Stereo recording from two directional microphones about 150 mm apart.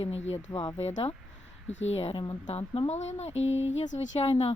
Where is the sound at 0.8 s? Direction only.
45° left (ahead or behind).